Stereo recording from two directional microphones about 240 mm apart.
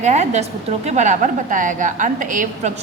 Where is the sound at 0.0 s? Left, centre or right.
Right.